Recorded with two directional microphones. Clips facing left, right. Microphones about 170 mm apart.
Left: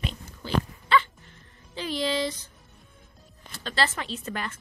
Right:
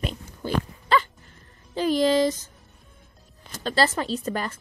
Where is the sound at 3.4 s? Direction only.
40° right (ahead or behind).